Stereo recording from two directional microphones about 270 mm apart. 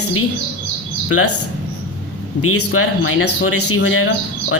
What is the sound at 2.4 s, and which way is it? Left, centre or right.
Speech, left.